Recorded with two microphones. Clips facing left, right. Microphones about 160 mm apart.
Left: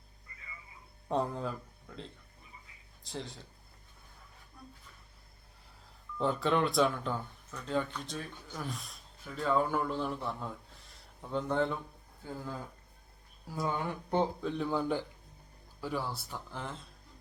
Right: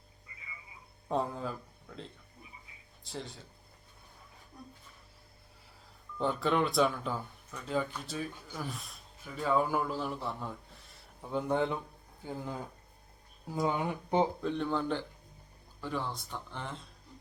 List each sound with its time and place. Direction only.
1.0 s speech: centre (ahead or behind)
6.1 s speech: centre (ahead or behind)
14.4 s speech: 5° left (ahead or behind)